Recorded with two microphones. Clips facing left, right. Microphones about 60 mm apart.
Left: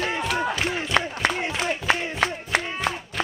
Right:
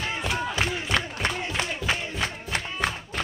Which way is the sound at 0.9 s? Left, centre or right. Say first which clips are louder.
Left 5 dB; left.